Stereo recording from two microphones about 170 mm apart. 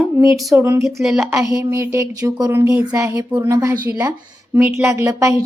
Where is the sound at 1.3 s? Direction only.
20° right (ahead or behind).